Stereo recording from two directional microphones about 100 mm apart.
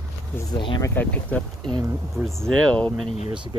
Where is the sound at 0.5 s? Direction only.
50° left (ahead or behind).